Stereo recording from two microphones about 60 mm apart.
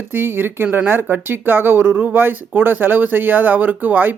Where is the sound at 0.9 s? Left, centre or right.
Right.